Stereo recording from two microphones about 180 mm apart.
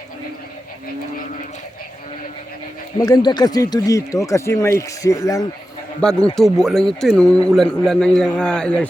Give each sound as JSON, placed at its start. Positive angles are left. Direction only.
{"t": 3.0, "sound": "speech", "side_deg": 20}
{"t": 6.0, "sound": "speech", "side_deg": 5}